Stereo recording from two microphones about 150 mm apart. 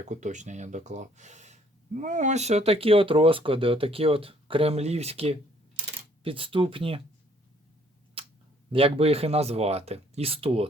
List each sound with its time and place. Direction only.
0.0 s speech: 55° right (ahead or behind); by 7.0 s 35° right (ahead or behind)
8.7 s speech: 40° right (ahead or behind)